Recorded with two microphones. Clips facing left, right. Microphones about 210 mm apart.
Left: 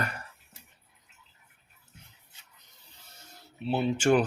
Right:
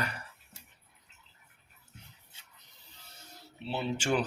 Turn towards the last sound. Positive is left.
turn(degrees=55)  # may be behind; listen again after turning